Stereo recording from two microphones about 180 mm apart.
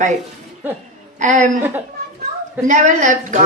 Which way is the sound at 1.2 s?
45° right (ahead or behind).